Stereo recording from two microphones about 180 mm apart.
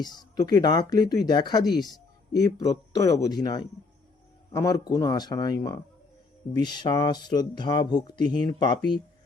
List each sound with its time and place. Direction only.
0.0 s speech: 20° left (ahead or behind)